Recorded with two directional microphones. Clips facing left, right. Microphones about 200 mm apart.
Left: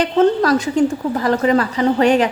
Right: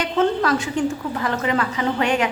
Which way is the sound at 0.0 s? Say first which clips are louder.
Left 5 dB; 40° left (ahead or behind).